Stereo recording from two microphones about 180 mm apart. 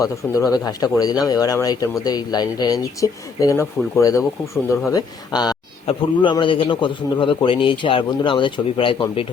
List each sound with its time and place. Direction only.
0.6 s speech: 20° left (ahead or behind)